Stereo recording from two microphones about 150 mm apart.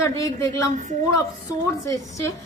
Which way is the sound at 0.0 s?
20° left (ahead or behind).